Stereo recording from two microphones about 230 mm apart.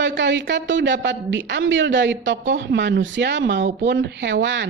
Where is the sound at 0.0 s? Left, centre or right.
Right.